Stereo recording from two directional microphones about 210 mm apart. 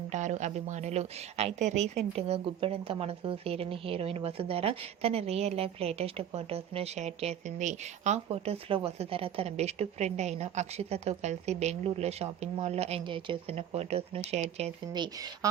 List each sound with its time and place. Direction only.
0.1 s a woman's voice: 35° right (ahead or behind); by 15.4 s 20° right (ahead or behind)